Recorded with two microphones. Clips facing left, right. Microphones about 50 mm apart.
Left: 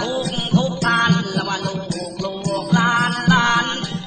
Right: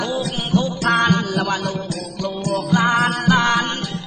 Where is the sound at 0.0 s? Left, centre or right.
Centre.